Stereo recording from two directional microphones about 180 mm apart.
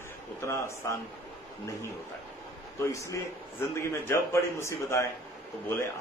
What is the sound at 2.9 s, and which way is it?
A man's voice, 15° left (ahead or behind).